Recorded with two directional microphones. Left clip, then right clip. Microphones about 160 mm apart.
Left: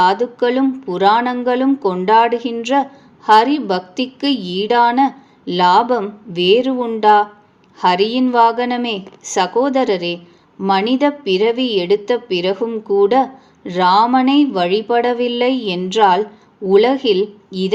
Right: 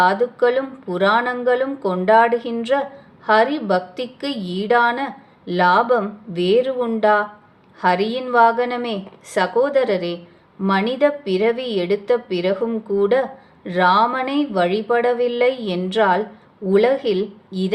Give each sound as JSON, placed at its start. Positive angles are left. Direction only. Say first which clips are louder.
{"t": 0.0, "sound": "a woman's voice", "louder": "left 2 dB", "side_deg": 25}